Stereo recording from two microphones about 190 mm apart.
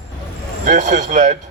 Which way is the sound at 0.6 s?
40° right (ahead or behind).